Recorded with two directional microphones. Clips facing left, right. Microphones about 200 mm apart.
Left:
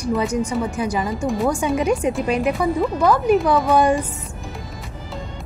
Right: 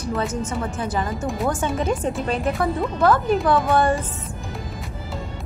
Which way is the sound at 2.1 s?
10° left (ahead or behind).